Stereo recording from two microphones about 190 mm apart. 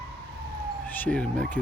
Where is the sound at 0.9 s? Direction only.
5° left (ahead or behind).